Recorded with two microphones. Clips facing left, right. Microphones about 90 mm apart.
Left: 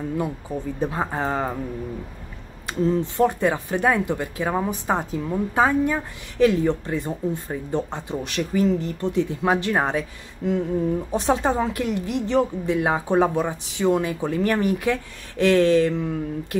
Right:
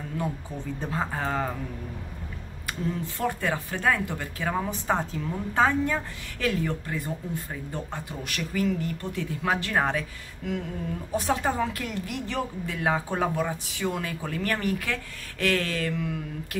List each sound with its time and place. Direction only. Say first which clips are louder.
0.7 s speech: left 4 dB; 20° left (ahead or behind)
2.6 s speech: left 9 dB; 20° left (ahead or behind)